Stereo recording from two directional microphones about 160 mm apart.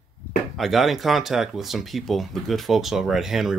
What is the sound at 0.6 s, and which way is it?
Speech, centre (ahead or behind).